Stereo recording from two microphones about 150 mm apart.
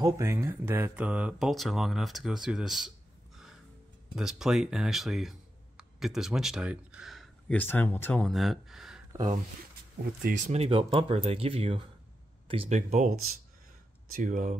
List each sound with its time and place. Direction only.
0.0 s speech: 20° right (ahead or behind); by 2.9 s centre (ahead or behind)
4.1 s speech: 5° right (ahead or behind)
7.5 s speech: 10° left (ahead or behind); by 9.0 s 5° right (ahead or behind)
10.2 s speech: 50° right (ahead or behind)
12.7 s speech: 55° right (ahead or behind)
14.1 s speech: 60° right (ahead or behind)